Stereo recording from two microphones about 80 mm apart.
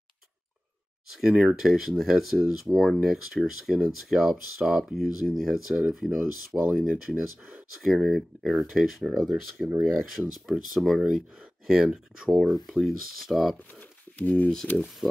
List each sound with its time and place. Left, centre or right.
1.1 s speech: centre
14.1 s speech: centre